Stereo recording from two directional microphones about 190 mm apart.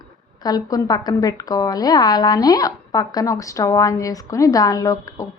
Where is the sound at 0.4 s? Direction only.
20° left (ahead or behind).